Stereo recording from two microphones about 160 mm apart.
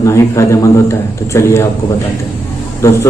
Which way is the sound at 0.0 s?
20° left (ahead or behind).